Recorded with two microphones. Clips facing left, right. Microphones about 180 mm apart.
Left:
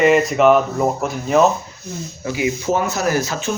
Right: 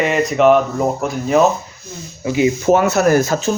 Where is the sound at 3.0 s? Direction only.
50° right (ahead or behind).